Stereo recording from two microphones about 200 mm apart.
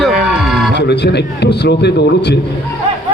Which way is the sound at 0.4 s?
Centre (ahead or behind).